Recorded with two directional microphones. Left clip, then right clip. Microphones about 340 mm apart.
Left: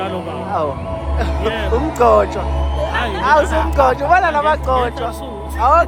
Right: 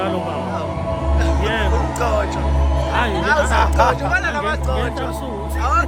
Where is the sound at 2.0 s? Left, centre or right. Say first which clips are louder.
Left 10 dB; centre.